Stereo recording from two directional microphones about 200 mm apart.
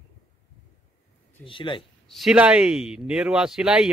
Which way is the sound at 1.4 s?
25° left (ahead or behind).